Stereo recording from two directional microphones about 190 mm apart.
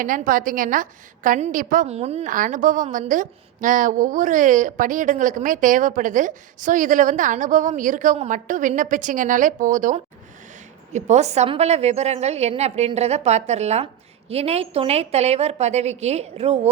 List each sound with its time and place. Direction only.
0.0 s a woman's voice: 45° right (ahead or behind)